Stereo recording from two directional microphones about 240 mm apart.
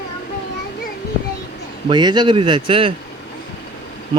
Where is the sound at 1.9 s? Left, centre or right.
Centre.